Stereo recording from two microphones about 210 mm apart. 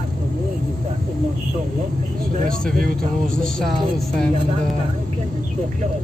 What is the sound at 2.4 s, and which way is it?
Speech, 40° right (ahead or behind).